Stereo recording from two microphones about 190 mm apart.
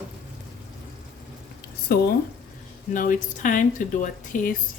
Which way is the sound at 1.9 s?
50° left (ahead or behind).